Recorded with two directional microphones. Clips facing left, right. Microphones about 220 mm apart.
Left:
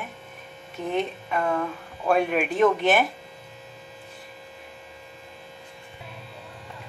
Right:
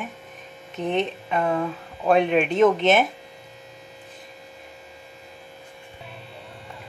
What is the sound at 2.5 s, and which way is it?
Speech, 20° right (ahead or behind).